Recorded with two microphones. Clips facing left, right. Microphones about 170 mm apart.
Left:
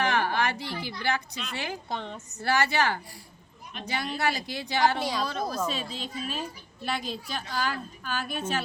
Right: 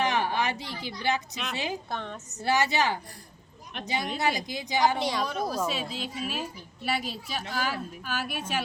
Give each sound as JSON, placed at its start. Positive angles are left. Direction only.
{"t": 0.0, "sound": "a sound", "side_deg": -20}
{"t": 0.8, "sound": "a woman's voice", "side_deg": -20}
{"t": 1.9, "sound": "a woman's voice", "side_deg": 15}
{"t": 2.4, "sound": "a woman's voice", "side_deg": -20}